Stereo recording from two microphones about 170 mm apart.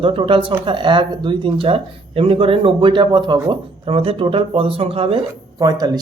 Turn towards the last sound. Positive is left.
turn(degrees=-20)  # may be behind; listen again after turning